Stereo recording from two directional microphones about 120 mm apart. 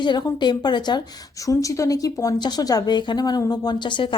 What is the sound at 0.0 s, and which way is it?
Speech, 40° left (ahead or behind).